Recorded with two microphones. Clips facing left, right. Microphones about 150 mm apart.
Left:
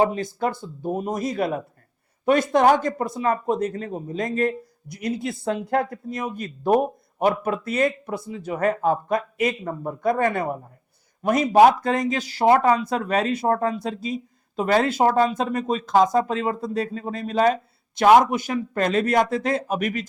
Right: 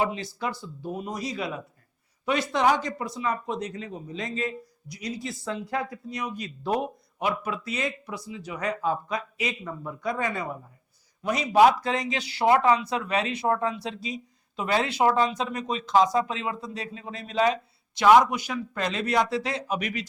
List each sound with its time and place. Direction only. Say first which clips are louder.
0.0 s speech: left 6 dB; 50° left (ahead or behind)